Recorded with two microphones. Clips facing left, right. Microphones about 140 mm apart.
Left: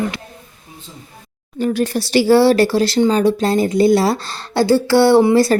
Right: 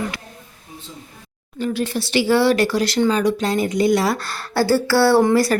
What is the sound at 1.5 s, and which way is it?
Speech, 45° left (ahead or behind).